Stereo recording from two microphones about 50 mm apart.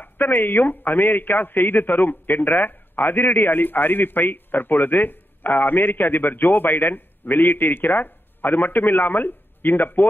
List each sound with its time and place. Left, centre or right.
0.0 s a man's voice: left